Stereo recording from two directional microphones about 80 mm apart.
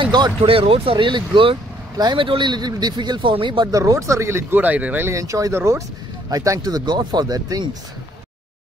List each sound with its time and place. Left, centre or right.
0.0 s speech: right
2.0 s speech: right
3.6 s speech: right
5.1 s speech: right
5.5 s speech: right
6.3 s speech: right